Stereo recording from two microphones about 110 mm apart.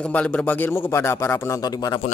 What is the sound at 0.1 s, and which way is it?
Speech, 15° left (ahead or behind).